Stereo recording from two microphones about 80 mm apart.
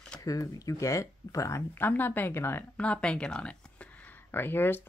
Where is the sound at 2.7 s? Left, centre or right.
Centre.